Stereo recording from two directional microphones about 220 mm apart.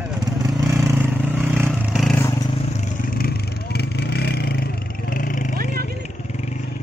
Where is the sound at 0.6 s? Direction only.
15° right (ahead or behind).